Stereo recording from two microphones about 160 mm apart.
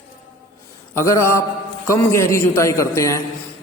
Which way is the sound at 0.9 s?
20° left (ahead or behind).